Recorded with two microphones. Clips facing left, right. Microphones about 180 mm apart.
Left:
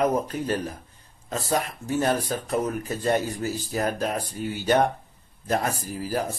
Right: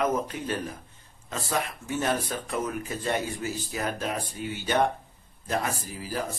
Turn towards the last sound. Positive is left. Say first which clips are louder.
# left 5 dB
turn(degrees=45)  # may be behind; listen again after turning